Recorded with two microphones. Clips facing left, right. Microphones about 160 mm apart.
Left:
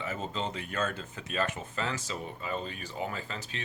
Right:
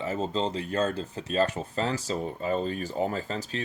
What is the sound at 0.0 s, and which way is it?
Speech, 35° right (ahead or behind).